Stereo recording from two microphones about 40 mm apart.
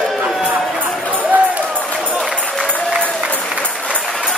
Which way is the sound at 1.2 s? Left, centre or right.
Right.